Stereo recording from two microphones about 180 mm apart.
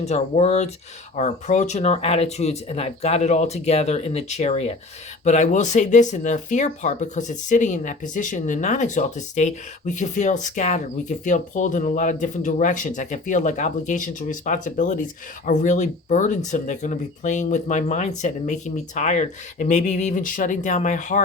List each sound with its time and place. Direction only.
0.0 s speech: 35° left (ahead or behind)